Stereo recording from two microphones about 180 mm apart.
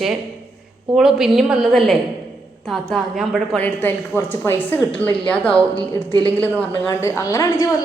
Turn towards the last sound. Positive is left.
turn(degrees=15)  # may be behind; listen again after turning